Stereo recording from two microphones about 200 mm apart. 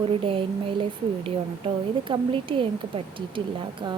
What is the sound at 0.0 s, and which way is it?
Speech, 25° right (ahead or behind).